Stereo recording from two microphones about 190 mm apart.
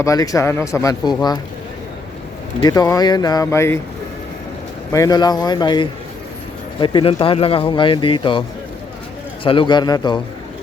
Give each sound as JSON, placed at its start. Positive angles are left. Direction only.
{"t": 0.0, "sound": "speech", "side_deg": 20}
{"t": 2.6, "sound": "speech", "side_deg": 20}
{"t": 4.9, "sound": "speech", "side_deg": 20}